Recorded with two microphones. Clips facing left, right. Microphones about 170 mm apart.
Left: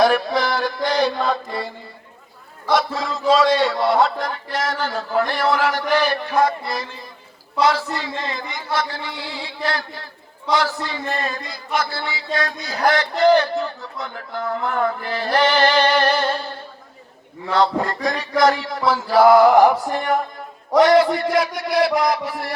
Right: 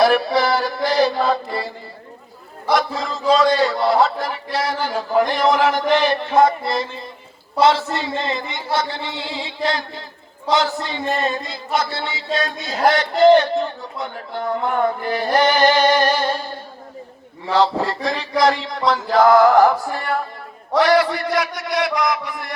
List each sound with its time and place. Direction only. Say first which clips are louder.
0.0 s chant: right 2 dB; 5° right (ahead or behind)
2.7 s a man's voice: even; centre (ahead or behind)
17.5 s chant: right 1 dB; 5° right (ahead or behind); by 19.7 s 15° left (ahead or behind)
19.8 s a sound: left 3 dB; 15° left (ahead or behind)
20.8 s a man's voice: left 2 dB; 25° left (ahead or behind)